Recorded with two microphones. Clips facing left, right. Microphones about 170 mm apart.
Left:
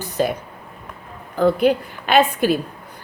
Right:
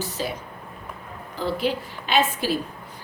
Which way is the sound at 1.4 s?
55° left (ahead or behind).